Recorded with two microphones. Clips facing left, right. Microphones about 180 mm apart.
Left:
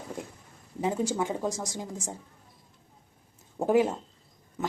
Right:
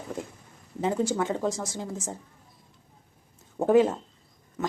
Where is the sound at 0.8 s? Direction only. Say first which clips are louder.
Right 2 dB; 15° left (ahead or behind).